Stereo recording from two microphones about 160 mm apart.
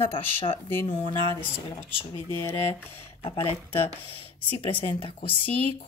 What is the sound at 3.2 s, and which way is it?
Speech, 35° left (ahead or behind).